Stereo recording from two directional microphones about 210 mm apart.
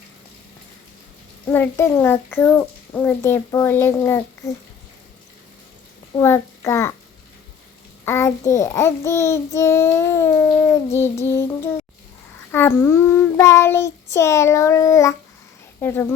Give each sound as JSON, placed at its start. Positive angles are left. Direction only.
{"t": 1.5, "sound": "a child's voice", "side_deg": 10}
{"t": 6.1, "sound": "a child's voice", "side_deg": 10}
{"t": 8.0, "sound": "a child's voice", "side_deg": 10}